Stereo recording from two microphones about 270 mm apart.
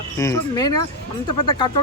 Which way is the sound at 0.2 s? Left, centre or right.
Centre.